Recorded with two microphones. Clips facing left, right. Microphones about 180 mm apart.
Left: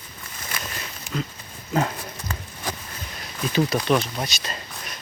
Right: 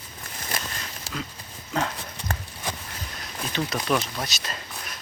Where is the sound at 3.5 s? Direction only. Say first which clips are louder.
Left 5 dB; 5° left (ahead or behind).